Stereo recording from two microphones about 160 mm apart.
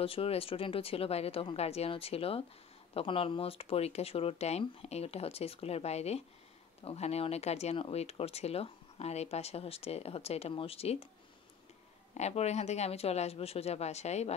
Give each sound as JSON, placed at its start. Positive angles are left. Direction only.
{"t": 0.0, "sound": "speech", "side_deg": 35}
{"t": 12.1, "sound": "a woman's voice", "side_deg": 45}